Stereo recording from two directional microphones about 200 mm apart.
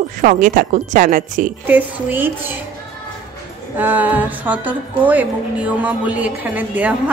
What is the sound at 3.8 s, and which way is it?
Music, 10° right (ahead or behind).